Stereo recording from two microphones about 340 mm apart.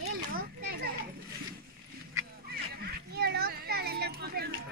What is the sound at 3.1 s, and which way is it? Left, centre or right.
Children playing, right.